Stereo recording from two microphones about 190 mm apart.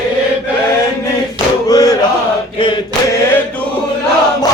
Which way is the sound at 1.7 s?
20° left (ahead or behind).